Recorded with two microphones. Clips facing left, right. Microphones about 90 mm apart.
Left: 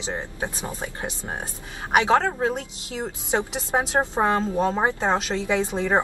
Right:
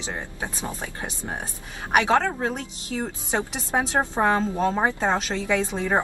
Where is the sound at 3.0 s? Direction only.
20° left (ahead or behind).